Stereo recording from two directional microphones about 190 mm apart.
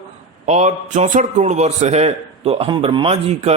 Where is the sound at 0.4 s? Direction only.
35° right (ahead or behind).